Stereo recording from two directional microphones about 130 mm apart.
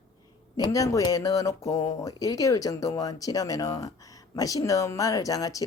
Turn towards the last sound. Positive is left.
turn(degrees=25)  # may be behind; listen again after turning